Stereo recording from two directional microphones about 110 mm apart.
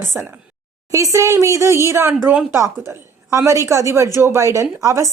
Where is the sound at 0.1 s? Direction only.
25° right (ahead or behind).